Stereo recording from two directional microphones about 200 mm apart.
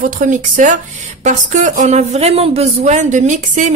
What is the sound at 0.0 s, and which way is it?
Speech, 40° right (ahead or behind).